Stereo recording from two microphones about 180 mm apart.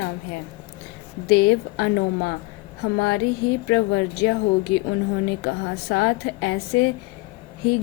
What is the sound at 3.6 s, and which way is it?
Speech, 90° left.